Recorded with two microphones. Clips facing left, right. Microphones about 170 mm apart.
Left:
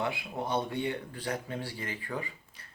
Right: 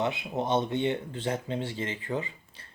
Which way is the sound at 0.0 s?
20° right (ahead or behind).